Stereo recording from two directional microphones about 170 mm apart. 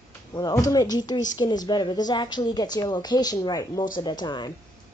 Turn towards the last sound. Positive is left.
turn(degrees=25)  # may be behind; listen again after turning